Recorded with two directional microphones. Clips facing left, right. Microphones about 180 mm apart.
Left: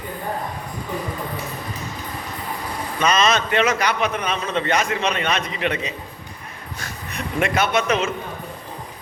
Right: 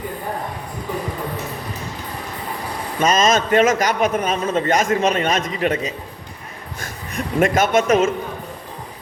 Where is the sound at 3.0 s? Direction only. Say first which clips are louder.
Right 3 dB; 45° right (ahead or behind).